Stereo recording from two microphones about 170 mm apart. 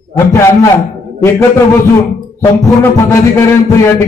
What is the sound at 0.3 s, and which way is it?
Music, 15° left (ahead or behind).